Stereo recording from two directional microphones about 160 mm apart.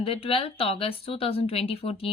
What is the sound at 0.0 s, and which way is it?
Speech, 35° left (ahead or behind).